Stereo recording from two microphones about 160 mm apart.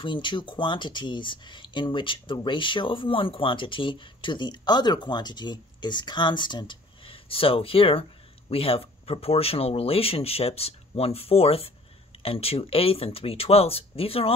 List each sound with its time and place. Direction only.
0.0 s speech: 30° left (ahead or behind)